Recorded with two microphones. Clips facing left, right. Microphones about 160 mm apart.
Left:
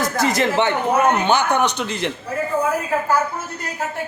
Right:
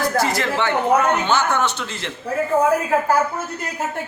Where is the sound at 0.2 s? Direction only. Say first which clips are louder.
Left 6 dB; 20° left (ahead or behind).